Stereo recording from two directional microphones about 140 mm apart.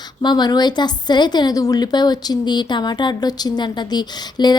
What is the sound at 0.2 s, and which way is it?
A woman's voice, 30° left (ahead or behind).